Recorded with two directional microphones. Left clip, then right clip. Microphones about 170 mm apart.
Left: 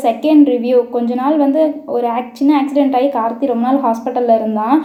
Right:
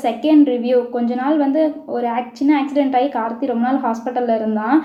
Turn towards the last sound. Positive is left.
turn(degrees=20)  # may be behind; listen again after turning